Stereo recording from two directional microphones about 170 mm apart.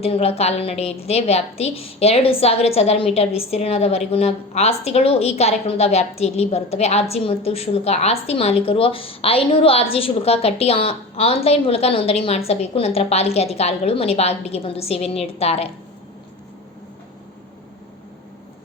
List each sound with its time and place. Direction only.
0.0 s a woman's voice: 35° left (ahead or behind)